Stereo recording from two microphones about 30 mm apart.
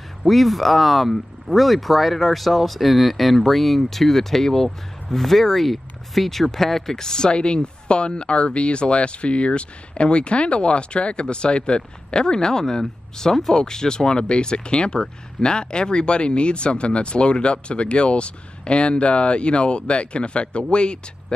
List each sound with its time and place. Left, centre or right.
0.2 s speech: centre
7.0 s speech: left
12.4 s speech: centre